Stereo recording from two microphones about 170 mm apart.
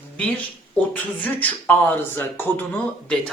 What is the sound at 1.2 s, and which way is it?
Speech, 10° left (ahead or behind).